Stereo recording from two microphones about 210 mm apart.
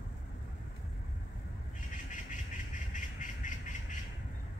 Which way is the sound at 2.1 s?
35° left (ahead or behind).